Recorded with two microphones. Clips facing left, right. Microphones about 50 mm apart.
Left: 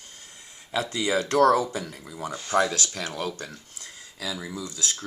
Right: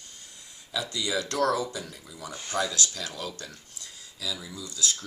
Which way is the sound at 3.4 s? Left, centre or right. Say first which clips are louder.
Left 4 dB; left.